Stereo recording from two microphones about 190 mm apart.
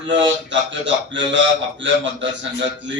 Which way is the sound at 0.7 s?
70° right (ahead or behind).